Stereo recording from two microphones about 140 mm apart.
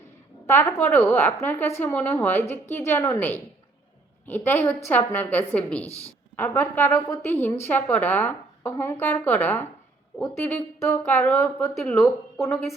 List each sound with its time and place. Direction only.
0.4 s a woman's voice: 20° left (ahead or behind)
12.5 s a woman's voice: centre (ahead or behind)